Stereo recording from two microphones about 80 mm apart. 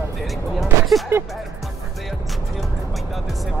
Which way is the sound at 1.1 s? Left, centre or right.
Right.